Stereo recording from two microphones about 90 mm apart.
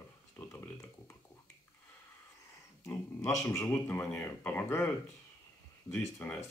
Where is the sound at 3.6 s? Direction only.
20° left (ahead or behind).